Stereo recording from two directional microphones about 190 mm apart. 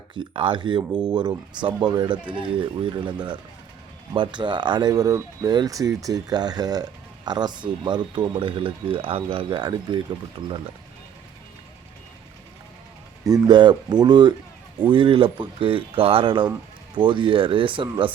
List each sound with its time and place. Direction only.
0.1 s speech: 25° right (ahead or behind)
13.2 s speech: 20° right (ahead or behind)